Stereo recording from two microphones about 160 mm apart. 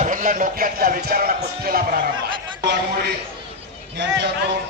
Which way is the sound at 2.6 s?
90° right.